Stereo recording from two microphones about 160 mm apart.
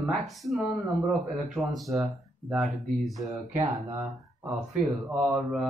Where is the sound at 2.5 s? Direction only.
Centre (ahead or behind).